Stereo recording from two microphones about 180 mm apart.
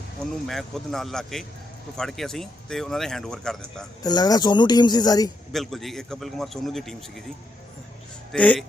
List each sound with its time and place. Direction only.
0.4 s speech: centre (ahead or behind)
4.0 s speech: 20° left (ahead or behind)
5.5 s speech: centre (ahead or behind)
8.3 s speech: 5° left (ahead or behind)